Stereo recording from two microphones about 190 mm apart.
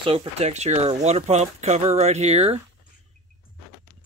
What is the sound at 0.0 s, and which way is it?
Speech, 30° right (ahead or behind).